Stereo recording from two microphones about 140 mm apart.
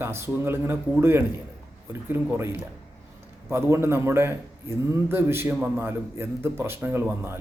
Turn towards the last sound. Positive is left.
turn(degrees=-15)  # may be behind; listen again after turning